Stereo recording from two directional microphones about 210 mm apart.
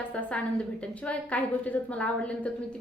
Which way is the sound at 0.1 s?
5° left (ahead or behind).